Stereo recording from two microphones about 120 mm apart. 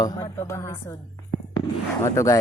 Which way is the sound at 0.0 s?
25° left (ahead or behind).